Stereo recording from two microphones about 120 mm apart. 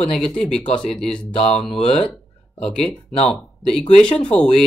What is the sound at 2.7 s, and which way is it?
Speech, 5° left (ahead or behind).